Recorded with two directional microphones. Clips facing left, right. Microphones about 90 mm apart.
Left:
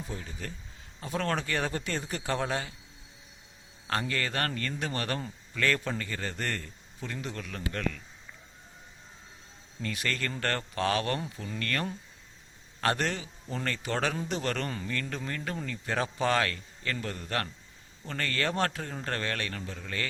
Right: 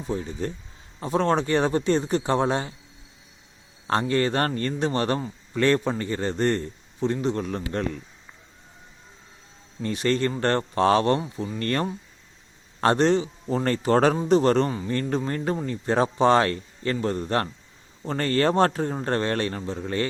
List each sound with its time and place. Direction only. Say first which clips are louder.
0.1 s a man's voice: right 11 dB; 30° right (ahead or behind)
3.8 s a man's voice: right 9 dB; 30° right (ahead or behind)
9.8 s a man's voice: right 10 dB; 30° right (ahead or behind)